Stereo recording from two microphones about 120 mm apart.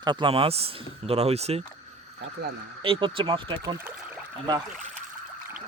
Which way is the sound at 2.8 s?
45° right (ahead or behind).